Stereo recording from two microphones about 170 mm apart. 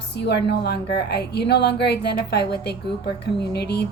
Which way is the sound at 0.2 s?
75° left (ahead or behind).